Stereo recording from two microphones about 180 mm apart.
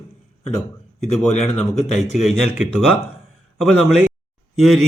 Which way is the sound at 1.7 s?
40° left (ahead or behind).